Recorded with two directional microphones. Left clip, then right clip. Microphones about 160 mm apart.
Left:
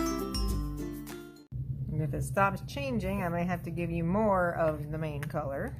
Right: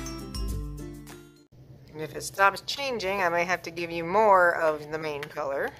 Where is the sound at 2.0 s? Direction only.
15° right (ahead or behind).